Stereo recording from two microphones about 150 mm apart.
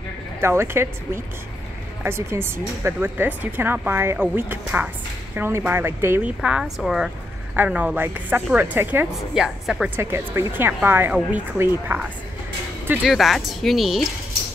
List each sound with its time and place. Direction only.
0.4 s speech: 15° right (ahead or behind)
9.9 s speech: 15° right (ahead or behind)
13.0 s speech: centre (ahead or behind)